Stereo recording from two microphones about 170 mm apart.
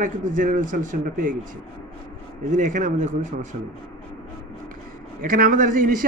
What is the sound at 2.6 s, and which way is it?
Speech, 45° right (ahead or behind).